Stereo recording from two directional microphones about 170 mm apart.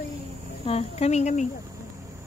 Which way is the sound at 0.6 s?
35° left (ahead or behind).